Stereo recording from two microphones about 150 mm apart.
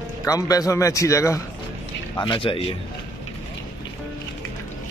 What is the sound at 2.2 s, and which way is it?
Speech, 35° left (ahead or behind).